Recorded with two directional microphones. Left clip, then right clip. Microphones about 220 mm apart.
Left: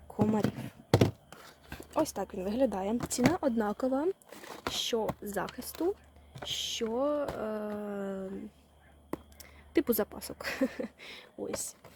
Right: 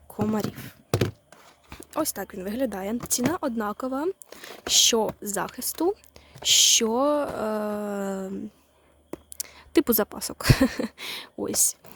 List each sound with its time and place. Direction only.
0.1 s a sound: 25° right (ahead or behind)
1.8 s speech: 20° right (ahead or behind)
4.7 s speech: 45° right (ahead or behind)
5.2 s speech: 35° right (ahead or behind)
6.4 s speech: 50° right (ahead or behind)
9.4 s speech: 40° right (ahead or behind)